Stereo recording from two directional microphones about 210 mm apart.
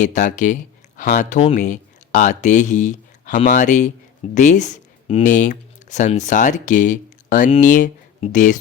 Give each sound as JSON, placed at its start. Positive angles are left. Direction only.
{"t": 0.0, "sound": "speech", "side_deg": 35}